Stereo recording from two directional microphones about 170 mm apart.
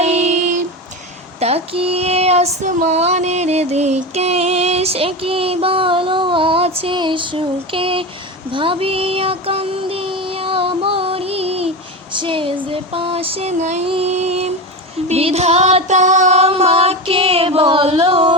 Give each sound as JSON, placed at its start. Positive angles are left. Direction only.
{"t": 0.0, "sound": "a sound", "side_deg": -40}
{"t": 1.4, "sound": "female singing", "side_deg": -35}
{"t": 8.5, "sound": "child singing", "side_deg": -30}
{"t": 12.1, "sound": "female singing", "side_deg": -30}